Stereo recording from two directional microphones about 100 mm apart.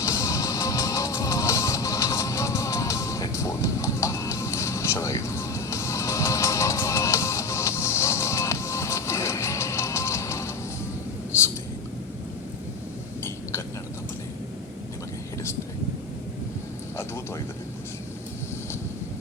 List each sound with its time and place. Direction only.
0.0 s music: 30° left (ahead or behind)